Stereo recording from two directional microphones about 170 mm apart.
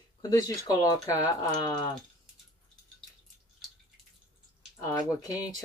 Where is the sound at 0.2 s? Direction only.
20° left (ahead or behind).